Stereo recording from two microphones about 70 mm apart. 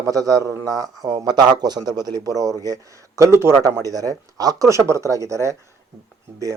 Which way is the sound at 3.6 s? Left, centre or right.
Right.